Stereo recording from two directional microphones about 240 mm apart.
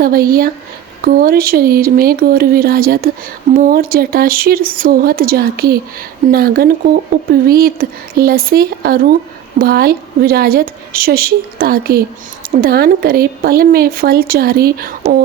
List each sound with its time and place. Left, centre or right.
0.0 s speech: right